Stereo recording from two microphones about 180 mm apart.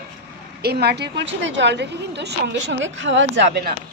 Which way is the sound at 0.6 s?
65° right (ahead or behind).